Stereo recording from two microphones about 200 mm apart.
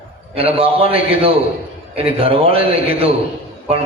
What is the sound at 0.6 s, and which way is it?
A man's voice, 30° right (ahead or behind).